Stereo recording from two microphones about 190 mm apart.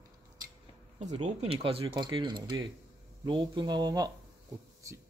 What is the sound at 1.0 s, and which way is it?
Speech, 35° right (ahead or behind).